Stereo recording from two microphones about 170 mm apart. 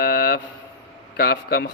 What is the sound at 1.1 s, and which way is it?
Speech, 75° left (ahead or behind).